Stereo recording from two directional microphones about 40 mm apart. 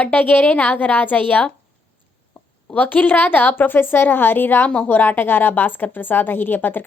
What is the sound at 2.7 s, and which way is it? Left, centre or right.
A woman's voice, left.